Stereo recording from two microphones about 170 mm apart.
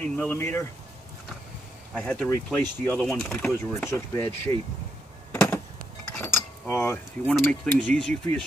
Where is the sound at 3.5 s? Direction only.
15° left (ahead or behind).